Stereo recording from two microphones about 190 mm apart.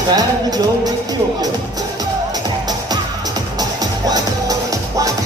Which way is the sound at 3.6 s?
20° right (ahead or behind).